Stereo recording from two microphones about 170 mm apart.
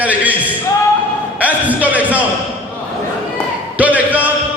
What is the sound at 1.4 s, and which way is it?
Music, 10° right (ahead or behind).